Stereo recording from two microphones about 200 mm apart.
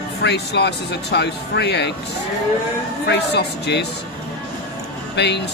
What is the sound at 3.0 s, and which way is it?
Speech, 55° left (ahead or behind).